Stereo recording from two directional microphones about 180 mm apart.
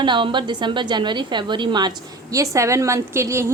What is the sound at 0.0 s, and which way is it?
A woman's voice, 25° right (ahead or behind).